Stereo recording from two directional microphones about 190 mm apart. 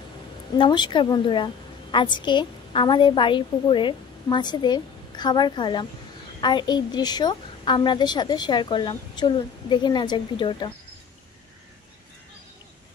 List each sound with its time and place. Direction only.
0.6 s a woman's voice: 25° left (ahead or behind)